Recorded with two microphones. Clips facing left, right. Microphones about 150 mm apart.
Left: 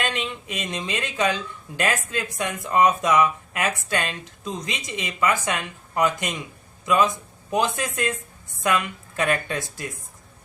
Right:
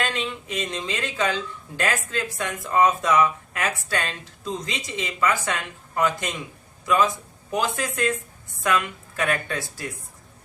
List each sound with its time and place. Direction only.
0.0 s a man's voice: 20° left (ahead or behind)